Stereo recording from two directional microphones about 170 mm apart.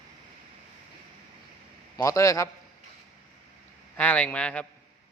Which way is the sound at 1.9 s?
20° left (ahead or behind).